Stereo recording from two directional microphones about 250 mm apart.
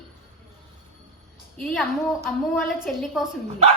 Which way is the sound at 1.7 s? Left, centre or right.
Centre.